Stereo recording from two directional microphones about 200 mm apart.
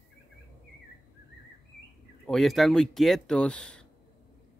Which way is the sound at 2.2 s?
Centre (ahead or behind).